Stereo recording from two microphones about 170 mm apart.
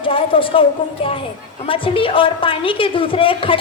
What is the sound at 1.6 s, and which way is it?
A woman's voice, 30° left (ahead or behind).